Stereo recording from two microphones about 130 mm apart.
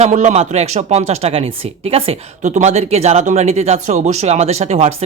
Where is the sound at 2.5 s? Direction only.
65° right (ahead or behind).